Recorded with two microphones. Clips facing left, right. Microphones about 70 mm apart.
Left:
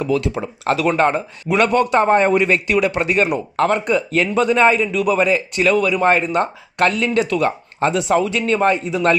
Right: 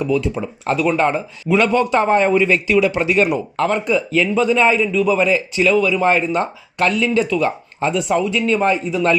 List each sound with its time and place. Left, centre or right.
0.6 s speech: left
2.3 s speech: left
7.9 s speech: left
8.3 s speech: left